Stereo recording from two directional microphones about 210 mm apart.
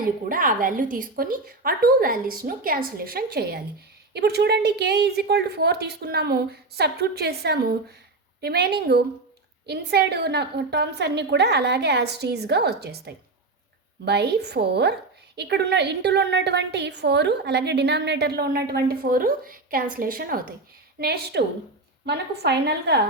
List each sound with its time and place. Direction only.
0.3 s a woman's voice: 40° right (ahead or behind)